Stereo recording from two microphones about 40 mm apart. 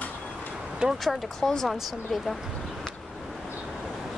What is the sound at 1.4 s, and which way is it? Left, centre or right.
Speech, centre.